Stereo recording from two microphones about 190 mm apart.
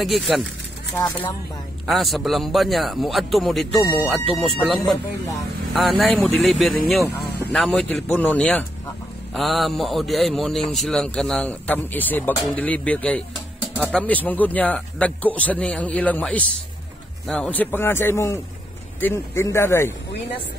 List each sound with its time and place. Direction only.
0.0 s a man's voice: centre (ahead or behind)
1.9 s a man's voice: centre (ahead or behind)